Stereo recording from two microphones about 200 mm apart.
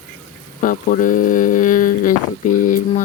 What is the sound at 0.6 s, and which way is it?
Speech, 40° left (ahead or behind).